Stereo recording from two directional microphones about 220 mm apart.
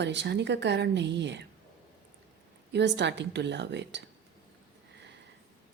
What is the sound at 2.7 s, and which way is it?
A woman's voice, 50° right (ahead or behind).